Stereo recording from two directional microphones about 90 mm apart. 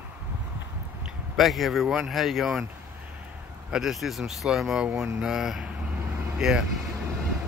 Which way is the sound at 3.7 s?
5° right (ahead or behind).